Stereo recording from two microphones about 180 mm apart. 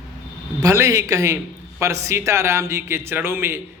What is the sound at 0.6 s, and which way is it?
A man's voice, 15° right (ahead or behind).